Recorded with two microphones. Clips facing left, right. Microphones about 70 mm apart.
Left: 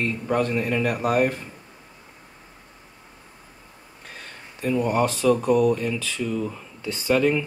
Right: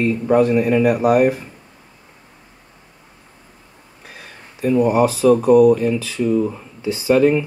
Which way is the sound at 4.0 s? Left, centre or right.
Centre.